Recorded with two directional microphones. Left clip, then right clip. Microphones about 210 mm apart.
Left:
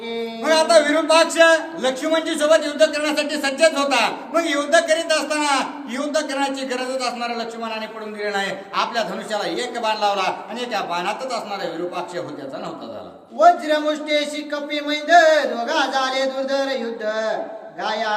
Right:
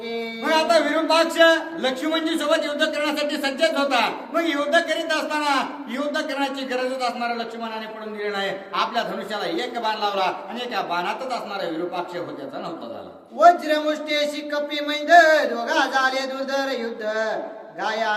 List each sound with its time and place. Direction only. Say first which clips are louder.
0.4 s a man's voice: left 4 dB; 10° left (ahead or behind)
13.4 s a man's voice: left 1 dB; 15° right (ahead or behind)